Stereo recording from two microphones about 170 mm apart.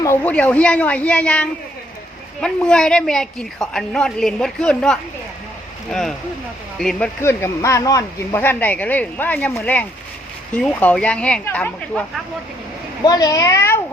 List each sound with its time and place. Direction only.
0.2 s a woman's voice: 10° left (ahead or behind)
7.2 s speech: 15° left (ahead or behind)
13.1 s a child's voice: 20° left (ahead or behind)